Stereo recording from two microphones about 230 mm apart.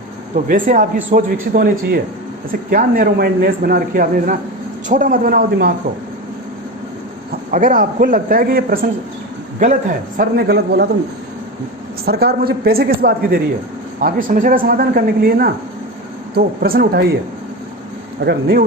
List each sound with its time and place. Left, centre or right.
0.4 s speech: right
7.5 s speech: right
10.2 s speech: right
12.0 s speech: right
18.2 s speech: right